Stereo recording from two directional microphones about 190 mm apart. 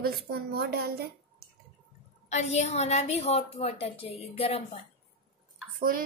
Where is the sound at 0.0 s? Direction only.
55° right (ahead or behind).